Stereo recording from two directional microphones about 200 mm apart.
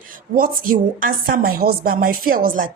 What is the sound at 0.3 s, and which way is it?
Speech, 45° right (ahead or behind).